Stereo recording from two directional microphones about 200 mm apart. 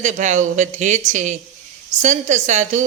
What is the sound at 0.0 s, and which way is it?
Speech, 35° right (ahead or behind).